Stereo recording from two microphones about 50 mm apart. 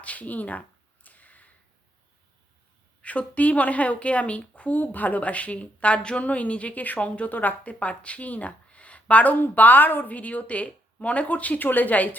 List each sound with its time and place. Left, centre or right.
0.0 s speech: left
1.0 s a sound: left
3.0 s a woman's voice: left